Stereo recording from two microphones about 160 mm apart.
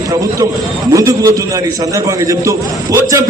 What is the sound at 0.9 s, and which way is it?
A man's voice, 20° right (ahead or behind).